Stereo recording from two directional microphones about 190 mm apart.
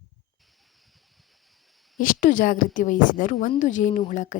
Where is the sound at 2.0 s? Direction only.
45° left (ahead or behind).